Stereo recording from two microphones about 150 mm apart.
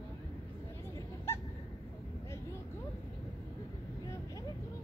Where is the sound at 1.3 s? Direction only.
15° left (ahead or behind).